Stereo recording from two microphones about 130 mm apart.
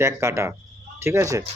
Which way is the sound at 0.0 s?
20° right (ahead or behind).